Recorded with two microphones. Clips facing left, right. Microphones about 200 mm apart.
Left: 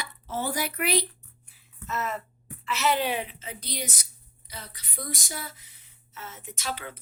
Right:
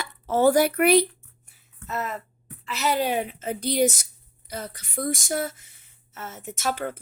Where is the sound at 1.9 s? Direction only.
35° right (ahead or behind).